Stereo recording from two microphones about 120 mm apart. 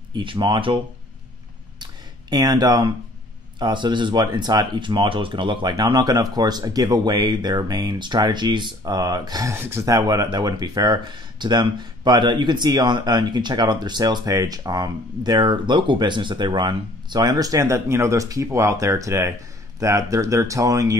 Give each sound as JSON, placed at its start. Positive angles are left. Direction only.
{"t": 0.1, "sound": "speech", "side_deg": -40}
{"t": 1.8, "sound": "a sound", "side_deg": -35}
{"t": 3.5, "sound": "speech", "side_deg": -40}